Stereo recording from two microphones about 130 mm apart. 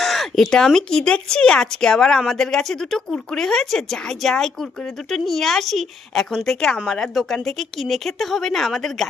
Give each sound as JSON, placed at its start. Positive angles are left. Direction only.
{"t": 0.0, "sound": "speech", "side_deg": 0}